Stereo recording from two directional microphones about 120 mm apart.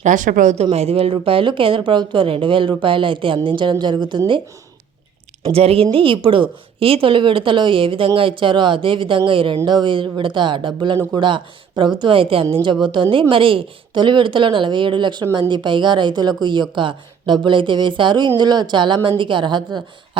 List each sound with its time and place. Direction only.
0.0 s a woman's voice: 90° right; by 4.2 s 40° right (ahead or behind)
5.5 s a woman's voice: 55° right (ahead or behind); by 19.8 s 40° right (ahead or behind)